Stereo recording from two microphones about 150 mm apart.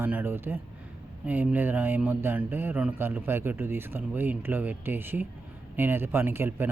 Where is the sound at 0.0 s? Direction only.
15° right (ahead or behind).